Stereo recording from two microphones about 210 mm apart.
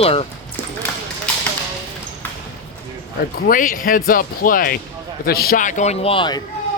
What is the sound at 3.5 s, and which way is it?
Speech, 40° left (ahead or behind).